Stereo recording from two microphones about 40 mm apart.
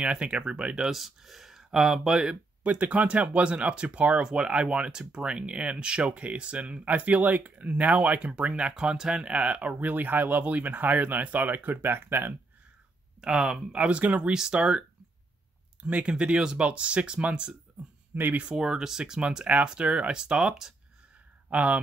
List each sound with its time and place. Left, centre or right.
0.0 s speech: right
0.8 s speech: centre
2.6 s speech: right
7.5 s speech: right
8.2 s speech: right
8.7 s speech: centre; by 12.4 s right
13.2 s speech: centre
14.0 s speech: right
14.5 s speech: right
16.6 s speech: right
18.1 s speech: right
18.6 s speech: centre
21.5 s speech: right